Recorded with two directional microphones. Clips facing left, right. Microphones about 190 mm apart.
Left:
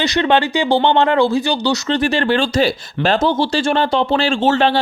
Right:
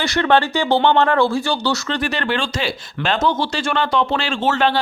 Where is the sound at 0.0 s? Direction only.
20° left (ahead or behind).